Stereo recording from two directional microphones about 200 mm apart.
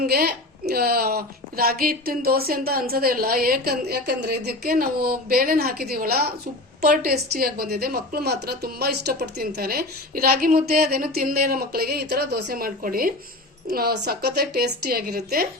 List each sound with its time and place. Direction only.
0.0 s a woman's voice: 50° right (ahead or behind)